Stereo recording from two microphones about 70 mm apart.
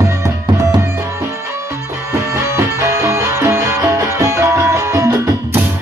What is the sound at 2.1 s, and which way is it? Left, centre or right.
Music, right.